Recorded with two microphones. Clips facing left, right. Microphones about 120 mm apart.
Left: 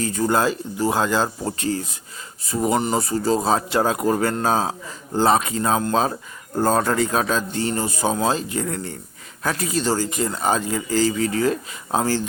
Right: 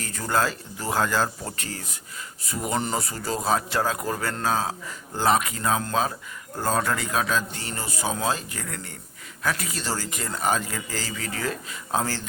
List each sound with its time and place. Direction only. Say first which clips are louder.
0.0 s speech: left 5 dB; 20° left (ahead or behind)